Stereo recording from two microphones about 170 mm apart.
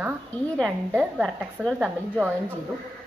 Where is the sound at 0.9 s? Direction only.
Centre (ahead or behind).